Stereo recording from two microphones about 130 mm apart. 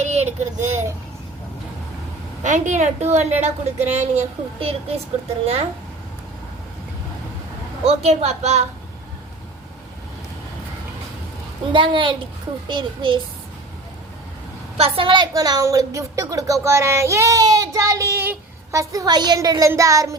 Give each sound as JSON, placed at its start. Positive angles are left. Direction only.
{"t": 0.0, "sound": "speech", "side_deg": -60}
{"t": 2.4, "sound": "a woman's voice", "side_deg": -70}
{"t": 7.9, "sound": "a woman's voice", "side_deg": -55}
{"t": 11.7, "sound": "a child's voice", "side_deg": -40}
{"t": 14.8, "sound": "a woman's voice", "side_deg": -45}